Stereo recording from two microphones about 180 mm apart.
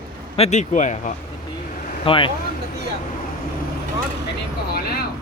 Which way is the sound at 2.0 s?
30° left (ahead or behind).